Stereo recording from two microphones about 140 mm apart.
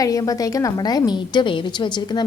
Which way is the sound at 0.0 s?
25° left (ahead or behind).